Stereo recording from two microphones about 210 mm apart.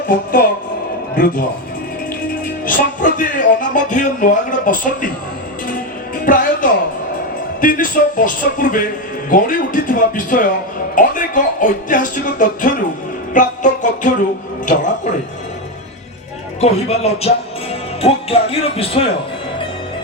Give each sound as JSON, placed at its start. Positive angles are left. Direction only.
{"t": 0.1, "sound": "a man's voice", "side_deg": 40}
{"t": 2.6, "sound": "music", "side_deg": 40}
{"t": 6.2, "sound": "music", "side_deg": 40}
{"t": 16.6, "sound": "speech", "side_deg": 30}